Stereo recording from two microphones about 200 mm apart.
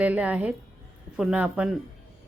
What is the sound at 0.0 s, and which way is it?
A woman's voice, 5° right (ahead or behind).